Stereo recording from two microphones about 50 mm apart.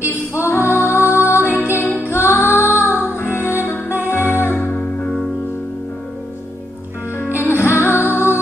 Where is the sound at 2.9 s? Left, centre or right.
Left.